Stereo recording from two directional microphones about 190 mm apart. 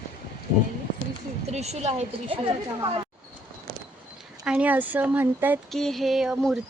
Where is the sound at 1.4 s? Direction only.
35° right (ahead or behind).